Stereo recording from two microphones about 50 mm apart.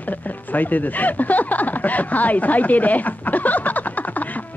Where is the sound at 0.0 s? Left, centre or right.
Left.